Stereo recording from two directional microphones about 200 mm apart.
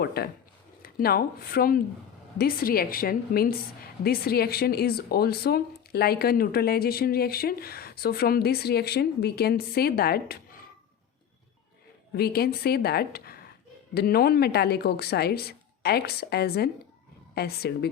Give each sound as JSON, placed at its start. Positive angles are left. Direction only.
{"t": 0.0, "sound": "speech", "side_deg": 50}
{"t": 12.1, "sound": "speech", "side_deg": 50}